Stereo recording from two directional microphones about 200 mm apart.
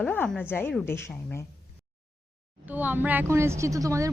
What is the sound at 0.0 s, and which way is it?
A woman's voice, 10° left (ahead or behind).